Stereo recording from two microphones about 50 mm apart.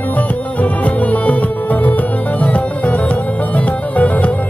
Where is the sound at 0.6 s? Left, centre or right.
Left.